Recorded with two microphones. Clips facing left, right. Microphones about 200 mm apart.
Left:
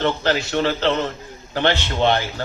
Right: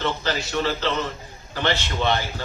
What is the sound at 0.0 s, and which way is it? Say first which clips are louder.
A man's voice: left 5 dB; 60° left (ahead or behind).